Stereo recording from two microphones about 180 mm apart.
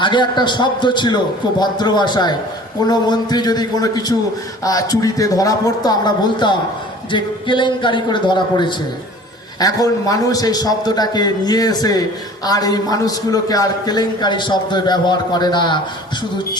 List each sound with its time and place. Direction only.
0.0 s a man's voice: 25° left (ahead or behind)